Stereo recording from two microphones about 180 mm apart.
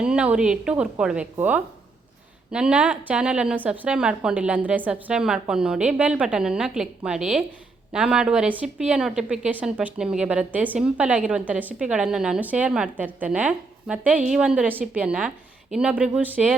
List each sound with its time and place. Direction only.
0.0 s a woman's voice: 5° right (ahead or behind)